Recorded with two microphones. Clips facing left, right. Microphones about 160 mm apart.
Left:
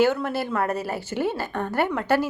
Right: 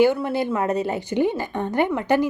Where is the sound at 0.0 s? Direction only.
10° right (ahead or behind).